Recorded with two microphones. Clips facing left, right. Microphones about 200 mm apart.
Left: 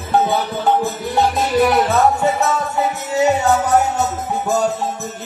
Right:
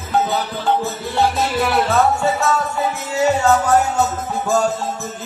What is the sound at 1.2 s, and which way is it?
Music, 20° left (ahead or behind).